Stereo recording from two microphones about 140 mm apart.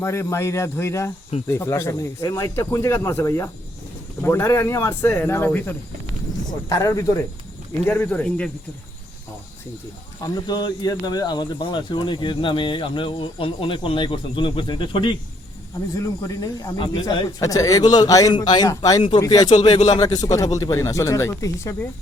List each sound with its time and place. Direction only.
0.0 s speech: 20° left (ahead or behind)
6.7 s speech: 25° left (ahead or behind)
7.9 s speech: 10° left (ahead or behind)
10.2 s speech: 30° left (ahead or behind)